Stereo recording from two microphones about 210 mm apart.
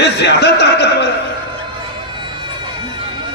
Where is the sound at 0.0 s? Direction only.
55° left (ahead or behind).